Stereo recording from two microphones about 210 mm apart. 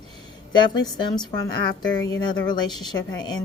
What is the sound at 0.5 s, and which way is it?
A woman's voice, 20° left (ahead or behind).